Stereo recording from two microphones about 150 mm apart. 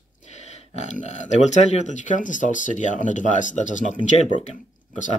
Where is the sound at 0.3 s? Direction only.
50° left (ahead or behind).